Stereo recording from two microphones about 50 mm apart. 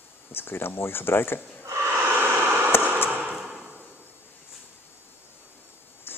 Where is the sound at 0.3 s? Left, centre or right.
Left.